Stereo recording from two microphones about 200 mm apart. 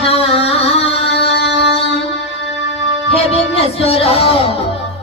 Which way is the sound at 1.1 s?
55° left (ahead or behind).